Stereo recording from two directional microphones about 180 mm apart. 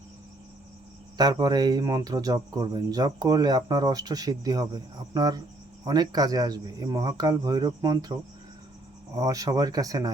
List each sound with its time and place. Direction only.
1.2 s speech: 20° right (ahead or behind)